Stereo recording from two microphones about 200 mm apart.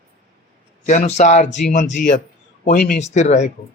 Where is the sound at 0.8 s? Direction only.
35° left (ahead or behind).